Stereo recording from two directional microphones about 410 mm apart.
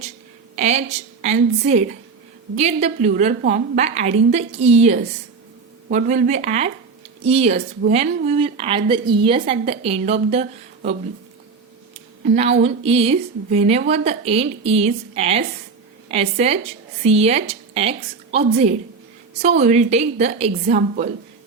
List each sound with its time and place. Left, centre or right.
0.5 s a woman's voice: centre
12.2 s a woman's voice: centre